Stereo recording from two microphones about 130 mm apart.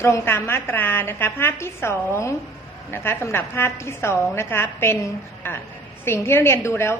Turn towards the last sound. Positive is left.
turn(degrees=20)  # may be behind; listen again after turning